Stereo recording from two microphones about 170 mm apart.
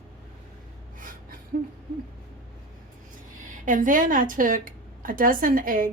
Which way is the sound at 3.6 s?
50° right (ahead or behind).